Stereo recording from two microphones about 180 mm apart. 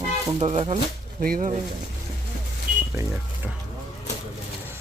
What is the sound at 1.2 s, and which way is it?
Speech, 50° right (ahead or behind).